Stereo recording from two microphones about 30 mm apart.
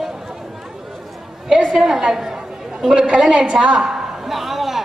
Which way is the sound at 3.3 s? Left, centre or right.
Right.